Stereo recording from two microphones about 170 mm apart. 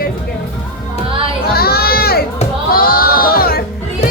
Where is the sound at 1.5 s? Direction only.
65° left (ahead or behind).